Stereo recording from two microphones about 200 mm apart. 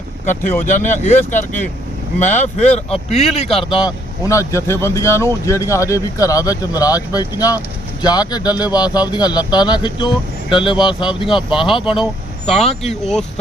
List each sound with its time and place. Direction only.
0.6 s speech: 40° left (ahead or behind); by 11.1 s 25° left (ahead or behind)
11.4 s speech: centre (ahead or behind)
12.6 s speech: 30° left (ahead or behind)